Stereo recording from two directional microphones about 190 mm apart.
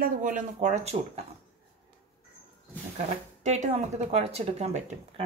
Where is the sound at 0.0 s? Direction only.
45° right (ahead or behind).